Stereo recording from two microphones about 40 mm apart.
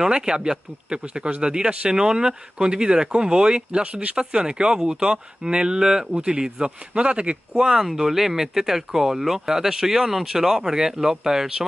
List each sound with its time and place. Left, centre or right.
0.0 s speech: centre